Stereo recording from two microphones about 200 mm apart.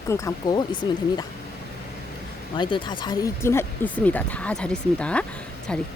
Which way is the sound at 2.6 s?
25° left (ahead or behind).